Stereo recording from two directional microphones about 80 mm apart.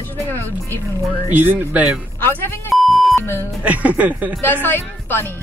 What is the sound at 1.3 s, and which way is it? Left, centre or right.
Speech, right.